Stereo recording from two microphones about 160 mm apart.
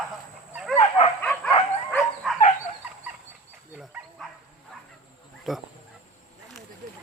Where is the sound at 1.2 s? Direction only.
10° left (ahead or behind).